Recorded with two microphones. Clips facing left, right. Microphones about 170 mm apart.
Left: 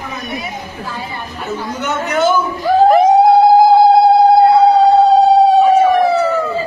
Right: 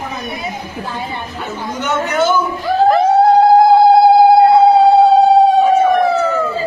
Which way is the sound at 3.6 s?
Centre (ahead or behind).